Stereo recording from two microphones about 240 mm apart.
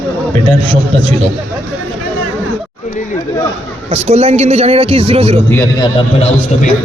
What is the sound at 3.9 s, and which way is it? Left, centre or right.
A man's voice, right.